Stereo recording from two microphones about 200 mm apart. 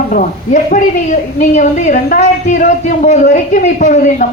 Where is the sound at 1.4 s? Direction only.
35° left (ahead or behind).